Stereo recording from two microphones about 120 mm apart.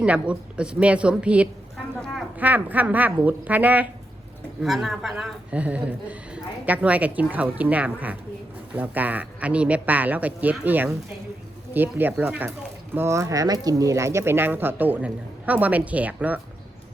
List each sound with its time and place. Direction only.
0.0 s a woman's voice: 10° right (ahead or behind)
4.6 s a woman's voice: centre (ahead or behind)